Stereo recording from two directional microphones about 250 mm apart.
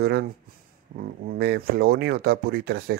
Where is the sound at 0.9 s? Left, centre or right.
Right.